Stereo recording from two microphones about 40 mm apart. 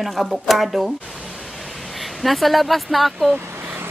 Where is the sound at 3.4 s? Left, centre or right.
Right.